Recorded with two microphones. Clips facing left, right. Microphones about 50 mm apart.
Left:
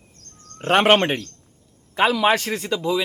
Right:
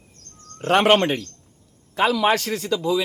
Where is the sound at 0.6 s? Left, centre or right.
Left.